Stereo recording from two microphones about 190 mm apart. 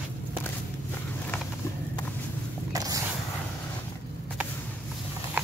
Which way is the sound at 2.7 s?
20° right (ahead or behind).